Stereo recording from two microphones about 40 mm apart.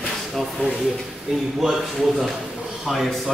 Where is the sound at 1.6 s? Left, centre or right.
Centre.